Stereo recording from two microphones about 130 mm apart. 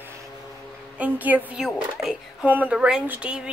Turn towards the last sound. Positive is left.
turn(degrees=-10)  # may be behind; listen again after turning